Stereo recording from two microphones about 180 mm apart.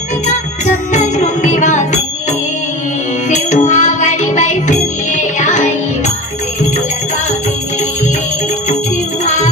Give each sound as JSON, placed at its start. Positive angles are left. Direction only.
{"t": 0.3, "sound": "music", "side_deg": 40}
{"t": 3.3, "sound": "music", "side_deg": 40}
{"t": 9.2, "sound": "music", "side_deg": 40}